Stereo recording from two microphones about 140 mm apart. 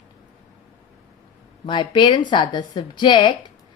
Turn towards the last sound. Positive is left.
turn(degrees=35)  # may be behind; listen again after turning